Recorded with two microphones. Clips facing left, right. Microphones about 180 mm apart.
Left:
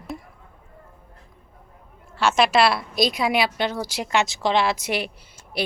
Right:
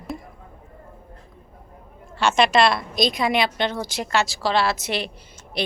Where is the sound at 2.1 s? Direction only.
5° left (ahead or behind).